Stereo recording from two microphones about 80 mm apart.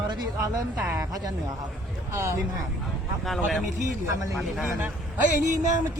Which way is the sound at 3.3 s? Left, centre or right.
Centre.